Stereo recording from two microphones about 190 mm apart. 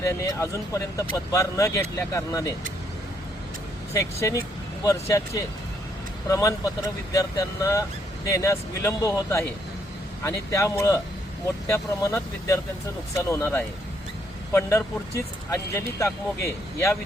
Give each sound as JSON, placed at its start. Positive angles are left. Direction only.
{"t": 0.0, "sound": "speech", "side_deg": 15}
{"t": 3.9, "sound": "speech", "side_deg": 15}